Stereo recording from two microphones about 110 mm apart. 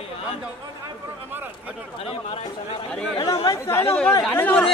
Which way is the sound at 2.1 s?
60° left (ahead or behind).